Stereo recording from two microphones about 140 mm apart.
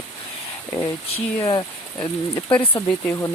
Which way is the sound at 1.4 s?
30° left (ahead or behind).